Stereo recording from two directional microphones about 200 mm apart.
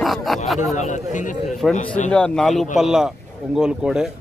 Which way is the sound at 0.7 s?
35° left (ahead or behind).